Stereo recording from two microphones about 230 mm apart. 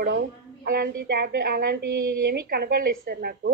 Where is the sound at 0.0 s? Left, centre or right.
Right.